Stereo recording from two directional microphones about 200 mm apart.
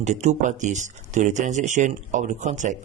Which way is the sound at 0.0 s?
35° right (ahead or behind).